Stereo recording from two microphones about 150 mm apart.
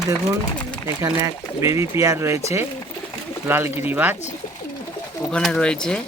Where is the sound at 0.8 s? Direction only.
20° right (ahead or behind).